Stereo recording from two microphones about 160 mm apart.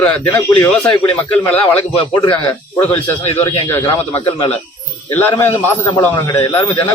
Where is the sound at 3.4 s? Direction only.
20° left (ahead or behind).